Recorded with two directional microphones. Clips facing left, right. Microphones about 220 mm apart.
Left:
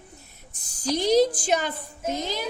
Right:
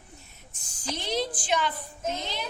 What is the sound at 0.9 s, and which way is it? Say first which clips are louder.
Speech: left 11 dB; 40° left (ahead or behind).